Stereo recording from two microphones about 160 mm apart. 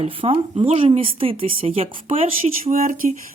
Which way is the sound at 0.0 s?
35° right (ahead or behind).